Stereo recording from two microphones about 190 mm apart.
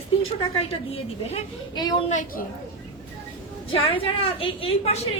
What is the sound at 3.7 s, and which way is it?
A woman's voice, 30° left (ahead or behind).